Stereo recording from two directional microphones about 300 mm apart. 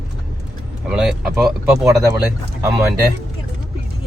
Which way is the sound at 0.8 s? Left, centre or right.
Centre.